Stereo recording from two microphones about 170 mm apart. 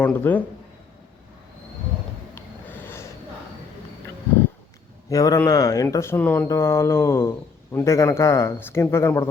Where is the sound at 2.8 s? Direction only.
15° left (ahead or behind).